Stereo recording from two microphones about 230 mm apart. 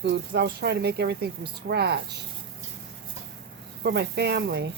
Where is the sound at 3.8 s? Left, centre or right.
Right.